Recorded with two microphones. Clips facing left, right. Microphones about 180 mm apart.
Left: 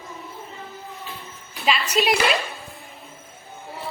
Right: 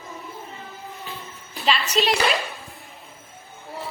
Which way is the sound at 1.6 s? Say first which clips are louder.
Left 1 dB; 10° left (ahead or behind).